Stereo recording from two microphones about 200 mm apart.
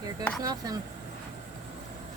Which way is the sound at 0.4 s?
20° right (ahead or behind).